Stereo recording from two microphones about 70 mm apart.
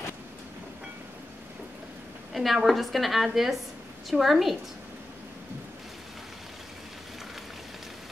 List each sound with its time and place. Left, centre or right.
2.3 s a woman's voice: centre